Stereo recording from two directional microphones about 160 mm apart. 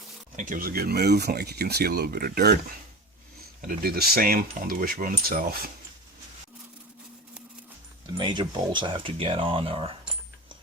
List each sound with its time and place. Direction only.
0.3 s speech: 55° right (ahead or behind); by 2.6 s 80° right
3.7 s speech: 75° right (ahead or behind)
8.2 s speech: 30° right (ahead or behind)